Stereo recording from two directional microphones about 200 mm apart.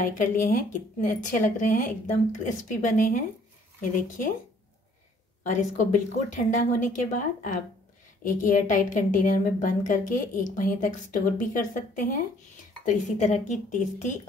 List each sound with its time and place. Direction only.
0.0 s a woman's voice: 45° left (ahead or behind)
5.4 s a woman's voice: 40° left (ahead or behind)